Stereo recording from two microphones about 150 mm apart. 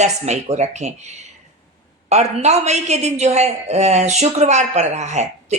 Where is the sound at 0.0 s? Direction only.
50° right (ahead or behind).